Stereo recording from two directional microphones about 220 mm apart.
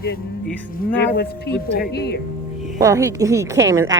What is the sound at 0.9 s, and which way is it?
Speech, 50° left (ahead or behind).